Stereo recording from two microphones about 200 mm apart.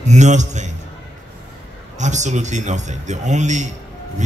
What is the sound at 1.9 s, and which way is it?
A man's voice, 35° right (ahead or behind).